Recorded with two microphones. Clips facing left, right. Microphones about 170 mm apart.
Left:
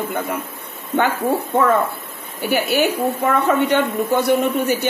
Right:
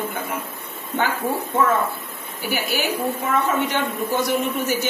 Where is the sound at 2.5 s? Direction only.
60° left (ahead or behind).